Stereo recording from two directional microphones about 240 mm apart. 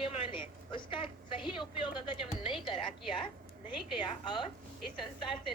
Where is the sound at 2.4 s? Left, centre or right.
Centre.